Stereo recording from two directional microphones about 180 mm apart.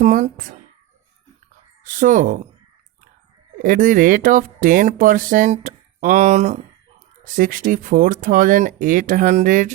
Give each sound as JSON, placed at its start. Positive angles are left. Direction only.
{"t": 0.0, "sound": "speech", "side_deg": -45}
{"t": 1.8, "sound": "speech", "side_deg": -50}
{"t": 3.6, "sound": "speech", "side_deg": -50}